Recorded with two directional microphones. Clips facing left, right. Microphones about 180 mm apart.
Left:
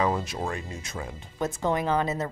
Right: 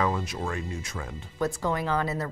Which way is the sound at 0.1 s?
30° left (ahead or behind).